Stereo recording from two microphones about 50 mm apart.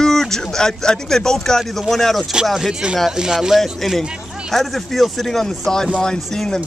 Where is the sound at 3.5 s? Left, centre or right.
Centre.